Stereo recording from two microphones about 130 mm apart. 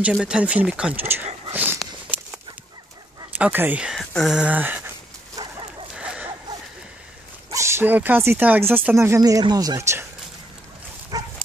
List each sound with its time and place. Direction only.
0.0 s speech: 5° right (ahead or behind)
1.5 s a sound: 15° right (ahead or behind)
3.3 s speech: 15° right (ahead or behind)
5.4 s dog: 40° right (ahead or behind)
5.9 s a sound: 10° right (ahead or behind)
7.5 s speech: 20° right (ahead or behind)
11.1 s dog: 30° right (ahead or behind)